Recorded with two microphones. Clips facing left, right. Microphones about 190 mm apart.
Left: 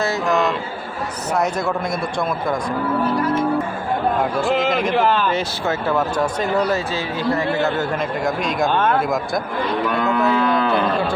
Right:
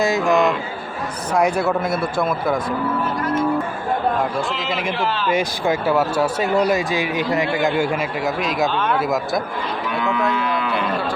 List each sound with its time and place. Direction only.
0.0 s speech: 15° right (ahead or behind)
4.5 s a man's voice: 50° left (ahead or behind)
5.3 s speech: 15° right (ahead or behind)
8.6 s a man's voice: 50° left (ahead or behind)
9.0 s a man's voice: centre (ahead or behind)
10.0 s cattle: 40° left (ahead or behind)